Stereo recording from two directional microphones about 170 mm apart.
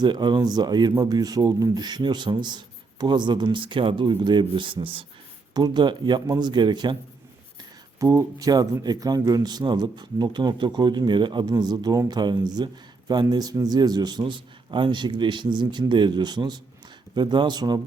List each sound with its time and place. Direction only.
0.0 s speech: 25° right (ahead or behind)
7.9 s speech: 20° right (ahead or behind)